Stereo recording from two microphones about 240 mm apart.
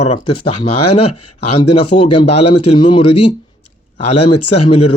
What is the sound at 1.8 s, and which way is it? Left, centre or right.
Speech, left.